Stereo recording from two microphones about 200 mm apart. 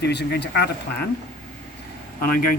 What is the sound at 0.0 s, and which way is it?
Speech, 55° left (ahead or behind).